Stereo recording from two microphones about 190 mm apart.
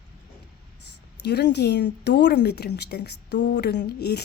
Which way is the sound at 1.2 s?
60° left (ahead or behind).